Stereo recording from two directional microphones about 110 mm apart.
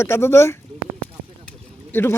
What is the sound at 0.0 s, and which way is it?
Speech, 25° left (ahead or behind).